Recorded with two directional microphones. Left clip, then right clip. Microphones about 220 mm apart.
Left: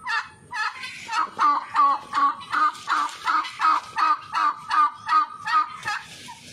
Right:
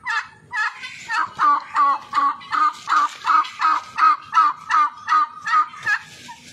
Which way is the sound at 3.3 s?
Centre (ahead or behind).